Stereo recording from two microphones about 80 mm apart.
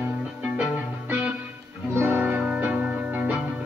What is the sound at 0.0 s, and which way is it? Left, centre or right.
Music, centre.